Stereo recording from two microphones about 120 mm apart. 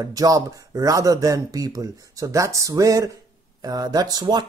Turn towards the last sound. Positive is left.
turn(degrees=-35)  # may be behind; listen again after turning